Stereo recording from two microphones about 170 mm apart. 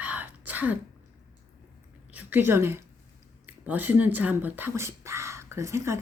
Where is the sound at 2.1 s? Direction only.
10° right (ahead or behind).